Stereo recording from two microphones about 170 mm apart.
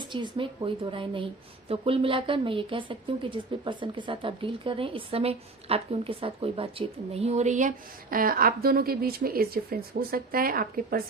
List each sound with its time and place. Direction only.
0.1 s a woman's voice: 30° right (ahead or behind); by 7.7 s 45° right (ahead or behind)
8.1 s speech: 60° right (ahead or behind)